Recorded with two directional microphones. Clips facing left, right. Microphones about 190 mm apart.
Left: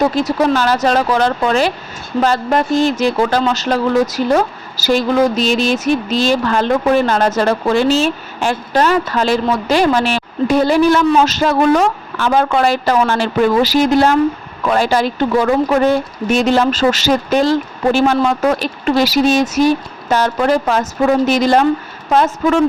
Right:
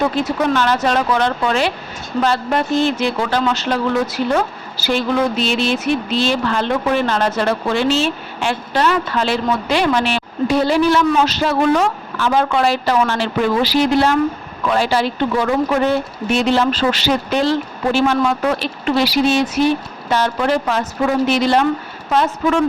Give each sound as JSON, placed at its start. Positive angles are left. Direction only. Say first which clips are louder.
{"t": 0.0, "sound": "speech", "louder": "left 3 dB", "side_deg": 40}